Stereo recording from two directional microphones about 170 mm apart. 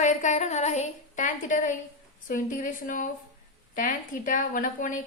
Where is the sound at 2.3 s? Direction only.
50° left (ahead or behind).